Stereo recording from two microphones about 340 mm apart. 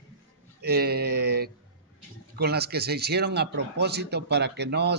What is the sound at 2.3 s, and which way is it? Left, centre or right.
A man's voice, right.